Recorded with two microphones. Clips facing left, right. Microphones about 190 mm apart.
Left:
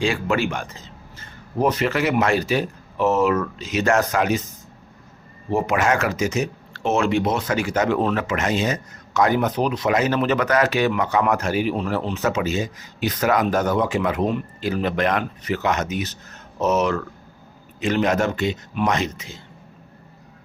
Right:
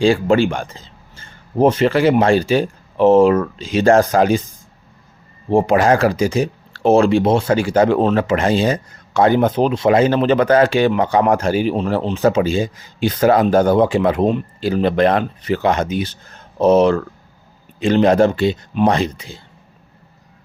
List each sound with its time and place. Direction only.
0.0 s speech: 30° right (ahead or behind)
5.5 s speech: 30° right (ahead or behind)